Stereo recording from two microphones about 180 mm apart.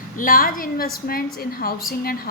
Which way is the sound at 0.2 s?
50° left (ahead or behind).